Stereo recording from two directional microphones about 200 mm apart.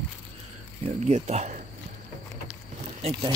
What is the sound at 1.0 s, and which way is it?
Speech, 35° right (ahead or behind).